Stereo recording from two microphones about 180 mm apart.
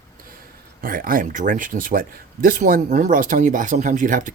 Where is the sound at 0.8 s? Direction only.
50° right (ahead or behind).